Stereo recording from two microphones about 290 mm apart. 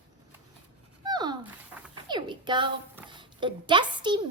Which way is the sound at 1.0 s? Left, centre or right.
Centre.